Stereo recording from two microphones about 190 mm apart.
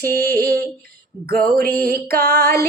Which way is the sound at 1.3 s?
50° right (ahead or behind).